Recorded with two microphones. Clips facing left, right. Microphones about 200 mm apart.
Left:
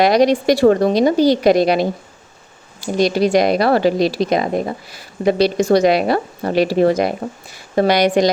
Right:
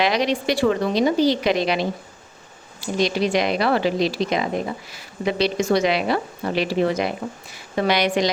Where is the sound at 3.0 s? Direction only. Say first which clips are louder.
Left 6 dB; 40° left (ahead or behind).